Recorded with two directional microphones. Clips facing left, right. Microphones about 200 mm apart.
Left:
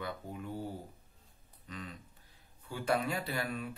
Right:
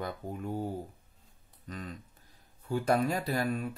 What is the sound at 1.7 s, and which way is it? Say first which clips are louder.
Speech: right 4 dB; 45° right (ahead or behind).